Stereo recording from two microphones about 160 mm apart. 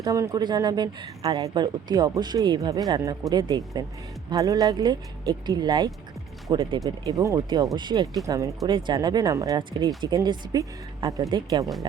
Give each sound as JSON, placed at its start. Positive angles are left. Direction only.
{"t": 0.0, "sound": "speech", "side_deg": -20}
{"t": 6.7, "sound": "speech", "side_deg": -20}